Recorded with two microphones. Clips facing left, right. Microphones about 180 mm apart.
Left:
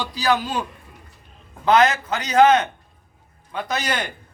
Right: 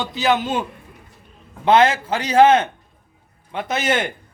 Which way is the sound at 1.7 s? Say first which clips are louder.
Right 2 dB; 30° right (ahead or behind).